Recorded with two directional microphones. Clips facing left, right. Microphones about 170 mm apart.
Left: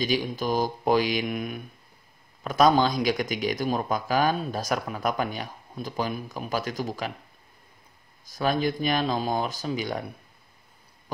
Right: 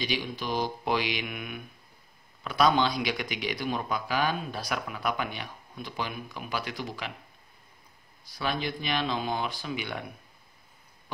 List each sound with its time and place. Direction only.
0.0 s speech: 45° left (ahead or behind)
8.3 s speech: 45° left (ahead or behind)